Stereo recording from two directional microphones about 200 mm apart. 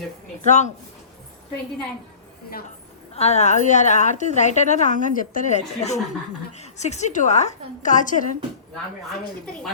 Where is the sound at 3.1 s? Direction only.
35° left (ahead or behind).